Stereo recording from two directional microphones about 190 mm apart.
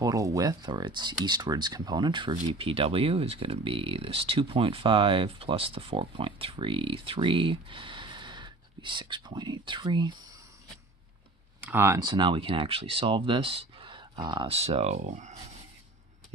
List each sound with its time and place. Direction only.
0.0 s speech: 15° right (ahead or behind)
11.6 s speech: 10° right (ahead or behind); by 15.3 s 40° right (ahead or behind)